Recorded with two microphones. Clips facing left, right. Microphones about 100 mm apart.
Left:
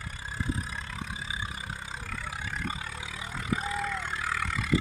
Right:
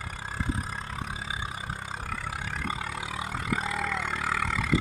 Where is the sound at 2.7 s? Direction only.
65° right (ahead or behind); by 4.5 s 90° right.